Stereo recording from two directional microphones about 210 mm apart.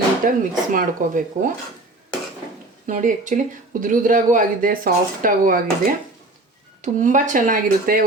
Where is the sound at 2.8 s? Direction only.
35° right (ahead or behind).